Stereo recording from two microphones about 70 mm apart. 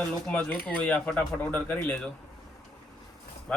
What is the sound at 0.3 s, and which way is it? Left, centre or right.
Speech, centre.